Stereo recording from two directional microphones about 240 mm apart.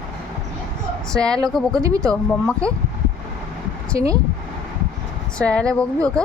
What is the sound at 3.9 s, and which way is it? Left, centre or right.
Speech, centre.